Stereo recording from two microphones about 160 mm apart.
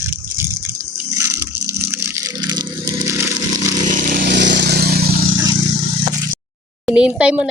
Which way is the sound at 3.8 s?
55° right (ahead or behind).